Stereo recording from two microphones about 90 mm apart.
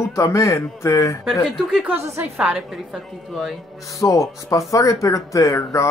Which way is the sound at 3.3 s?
Centre (ahead or behind).